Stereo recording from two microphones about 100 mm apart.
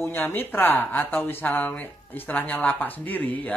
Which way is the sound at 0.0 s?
20° left (ahead or behind).